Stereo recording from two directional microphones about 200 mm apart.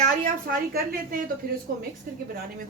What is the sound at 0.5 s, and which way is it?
A woman's voice, 50° right (ahead or behind).